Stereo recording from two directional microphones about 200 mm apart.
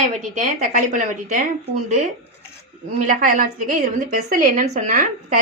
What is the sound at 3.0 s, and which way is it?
A woman's voice, 40° right (ahead or behind).